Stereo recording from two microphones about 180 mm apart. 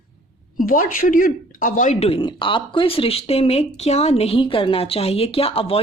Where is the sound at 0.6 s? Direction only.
50° left (ahead or behind).